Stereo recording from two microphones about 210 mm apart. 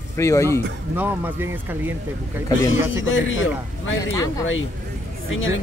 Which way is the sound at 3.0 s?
70° left (ahead or behind).